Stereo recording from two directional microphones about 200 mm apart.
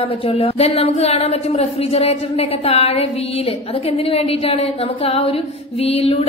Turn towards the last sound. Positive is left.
turn(degrees=30)  # may be behind; listen again after turning